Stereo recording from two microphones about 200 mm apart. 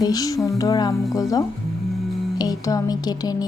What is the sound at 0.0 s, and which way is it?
Speech, 20° left (ahead or behind).